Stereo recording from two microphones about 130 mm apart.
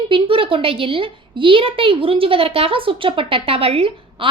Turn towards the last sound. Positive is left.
turn(degrees=-45)  # may be behind; listen again after turning